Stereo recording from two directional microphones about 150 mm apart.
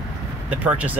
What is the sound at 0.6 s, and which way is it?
Speech, 10° right (ahead or behind).